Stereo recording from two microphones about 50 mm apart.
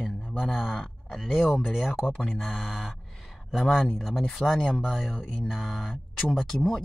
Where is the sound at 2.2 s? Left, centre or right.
Centre.